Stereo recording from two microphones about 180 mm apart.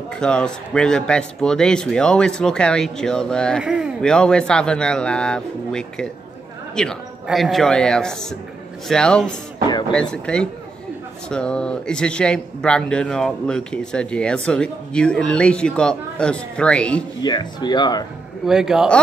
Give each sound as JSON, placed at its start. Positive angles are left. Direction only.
{"t": 0.1, "sound": "speech", "side_deg": 5}
{"t": 17.2, "sound": "speech", "side_deg": 25}
{"t": 18.4, "sound": "speech", "side_deg": -5}